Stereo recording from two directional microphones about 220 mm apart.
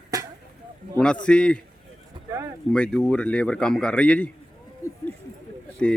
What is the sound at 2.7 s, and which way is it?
A man's voice, 5° left (ahead or behind).